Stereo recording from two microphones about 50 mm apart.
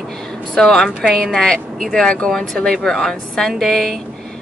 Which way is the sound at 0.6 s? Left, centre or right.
Centre.